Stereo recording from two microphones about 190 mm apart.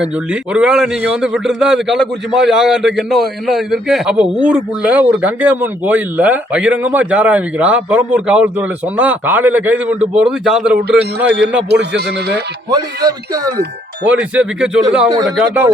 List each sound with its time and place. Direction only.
0.0 s a man's voice: 5° right (ahead or behind)
11.7 s speech: 60° right (ahead or behind)
12.7 s a man's voice: 20° right (ahead or behind)
14.1 s a man's voice: 5° right (ahead or behind)